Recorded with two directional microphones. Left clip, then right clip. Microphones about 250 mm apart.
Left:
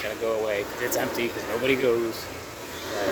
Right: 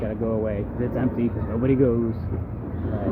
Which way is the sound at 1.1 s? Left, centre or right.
Centre.